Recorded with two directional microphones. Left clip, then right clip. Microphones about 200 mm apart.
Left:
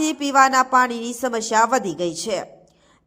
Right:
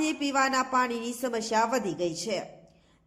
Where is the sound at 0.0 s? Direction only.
20° left (ahead or behind).